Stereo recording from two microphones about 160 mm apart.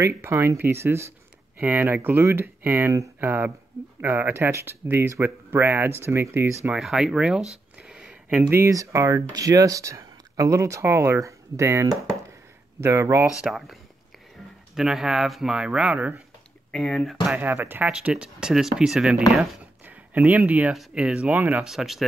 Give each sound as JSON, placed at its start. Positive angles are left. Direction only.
{"t": 0.2, "sound": "speech", "side_deg": -15}
{"t": 13.4, "sound": "speech", "side_deg": 0}
{"t": 14.8, "sound": "speech", "side_deg": -5}
{"t": 16.7, "sound": "speech", "side_deg": 5}
{"t": 17.4, "sound": "speech", "side_deg": -10}